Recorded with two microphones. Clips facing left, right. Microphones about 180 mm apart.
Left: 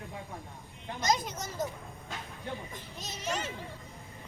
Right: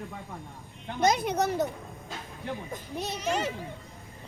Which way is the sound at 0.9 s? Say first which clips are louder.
Right 7 dB; 60° right (ahead or behind).